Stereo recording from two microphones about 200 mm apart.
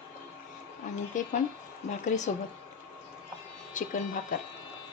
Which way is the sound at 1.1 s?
40° left (ahead or behind).